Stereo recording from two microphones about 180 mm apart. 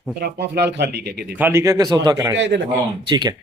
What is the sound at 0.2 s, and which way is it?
Speech, 65° right (ahead or behind).